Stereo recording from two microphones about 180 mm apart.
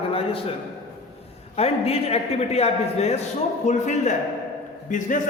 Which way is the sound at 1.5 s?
35° left (ahead or behind).